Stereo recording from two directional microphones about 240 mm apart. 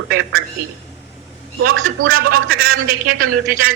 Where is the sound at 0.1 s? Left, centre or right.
Right.